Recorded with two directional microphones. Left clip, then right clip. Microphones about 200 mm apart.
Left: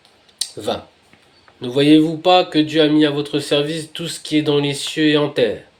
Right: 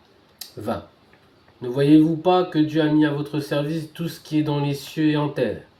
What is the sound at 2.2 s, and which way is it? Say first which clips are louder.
Speech: left 5 dB; 30° left (ahead or behind).